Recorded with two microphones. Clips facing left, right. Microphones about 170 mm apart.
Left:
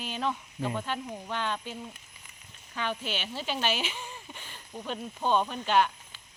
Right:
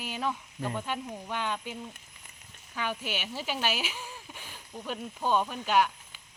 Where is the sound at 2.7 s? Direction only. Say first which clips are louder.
Left 1 dB; 10° right (ahead or behind).